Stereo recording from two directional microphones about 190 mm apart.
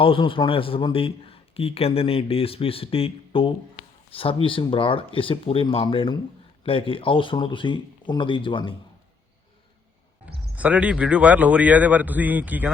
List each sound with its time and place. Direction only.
0.0 s speech: 25° left (ahead or behind)
10.5 s a man's voice: 10° right (ahead or behind)